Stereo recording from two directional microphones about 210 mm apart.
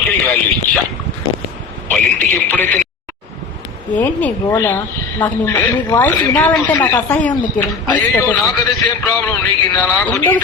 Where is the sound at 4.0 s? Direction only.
10° left (ahead or behind).